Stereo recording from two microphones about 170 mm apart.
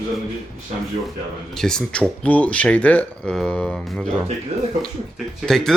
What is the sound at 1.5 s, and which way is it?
Speech, 5° left (ahead or behind).